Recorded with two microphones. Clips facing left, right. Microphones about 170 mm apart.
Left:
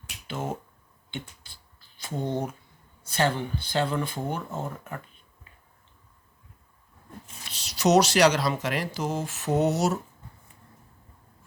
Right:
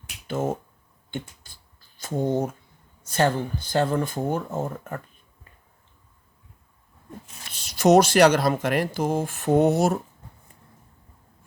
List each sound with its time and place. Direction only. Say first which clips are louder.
0.3 s speech: right 7 dB; 45° right (ahead or behind)
1.1 s a sound: right 4 dB; 45° right (ahead or behind)
3.1 s speech: right 3 dB; 45° right (ahead or behind)
7.4 s speech: right 5 dB; 55° right (ahead or behind)